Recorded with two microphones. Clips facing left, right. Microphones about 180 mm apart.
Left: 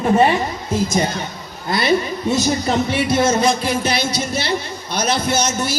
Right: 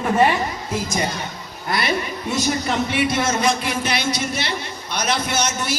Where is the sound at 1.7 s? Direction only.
25° left (ahead or behind).